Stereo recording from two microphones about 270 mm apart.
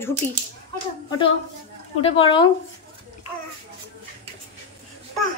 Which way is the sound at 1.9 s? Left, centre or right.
Left.